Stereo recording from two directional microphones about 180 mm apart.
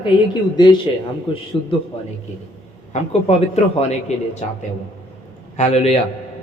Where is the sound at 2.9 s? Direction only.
35° left (ahead or behind).